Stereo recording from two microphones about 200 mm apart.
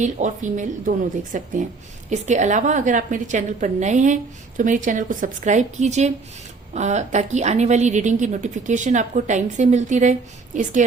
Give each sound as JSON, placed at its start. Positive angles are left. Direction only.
{"t": 0.0, "sound": "a woman's voice", "side_deg": -40}